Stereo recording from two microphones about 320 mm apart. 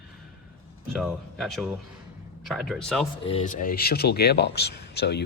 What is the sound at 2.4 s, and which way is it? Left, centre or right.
Speech, centre.